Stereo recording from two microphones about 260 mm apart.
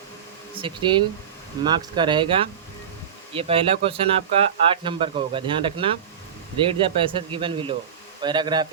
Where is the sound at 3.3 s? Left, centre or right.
Right.